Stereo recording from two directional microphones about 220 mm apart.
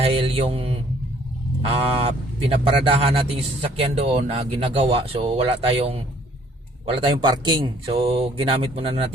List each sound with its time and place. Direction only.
0.0 s mantra: 25° right (ahead or behind)
1.6 s speech: 25° right (ahead or behind)